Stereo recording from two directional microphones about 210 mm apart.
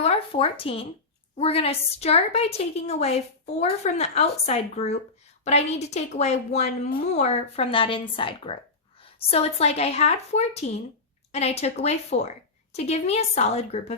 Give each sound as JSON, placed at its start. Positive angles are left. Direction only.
{"t": 0.0, "sound": "a woman's voice", "side_deg": 30}